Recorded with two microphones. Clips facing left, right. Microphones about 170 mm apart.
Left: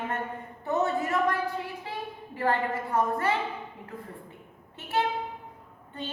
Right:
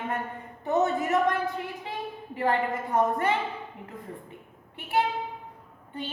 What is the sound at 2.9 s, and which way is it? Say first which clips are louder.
Speech: right 2 dB; 20° right (ahead or behind).